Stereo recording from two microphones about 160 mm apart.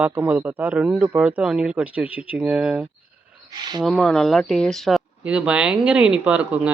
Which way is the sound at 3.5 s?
25° right (ahead or behind).